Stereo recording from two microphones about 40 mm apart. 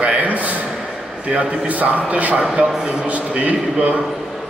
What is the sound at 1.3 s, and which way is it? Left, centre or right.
A man's voice, right.